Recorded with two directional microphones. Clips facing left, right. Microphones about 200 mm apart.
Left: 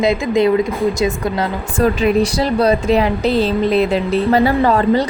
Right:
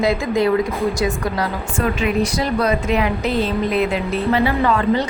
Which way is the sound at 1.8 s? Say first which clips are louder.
Left 5 dB; 35° left (ahead or behind).